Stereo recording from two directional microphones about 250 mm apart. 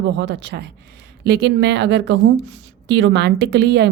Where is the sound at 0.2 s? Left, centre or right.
Right.